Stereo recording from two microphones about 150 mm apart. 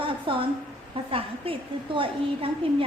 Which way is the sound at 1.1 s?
35° right (ahead or behind).